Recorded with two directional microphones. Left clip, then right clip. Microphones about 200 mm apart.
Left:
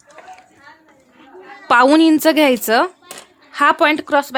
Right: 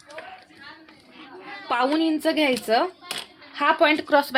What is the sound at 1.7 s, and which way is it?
A woman's voice, 55° left (ahead or behind).